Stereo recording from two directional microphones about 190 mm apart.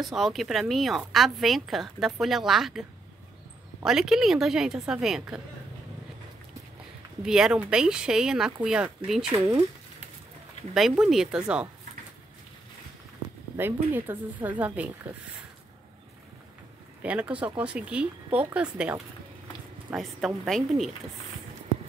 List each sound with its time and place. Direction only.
0.0 s a woman's voice: centre (ahead or behind)
3.8 s a woman's voice: centre (ahead or behind)
7.2 s a woman's voice: 5° right (ahead or behind)
9.3 s speech: 15° right (ahead or behind)
10.7 s a woman's voice: centre (ahead or behind)
13.6 s speech: 10° right (ahead or behind)
17.0 s a woman's voice: 5° right (ahead or behind)